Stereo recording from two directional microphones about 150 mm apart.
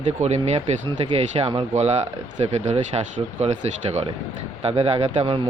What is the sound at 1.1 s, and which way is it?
A man's voice, 35° right (ahead or behind).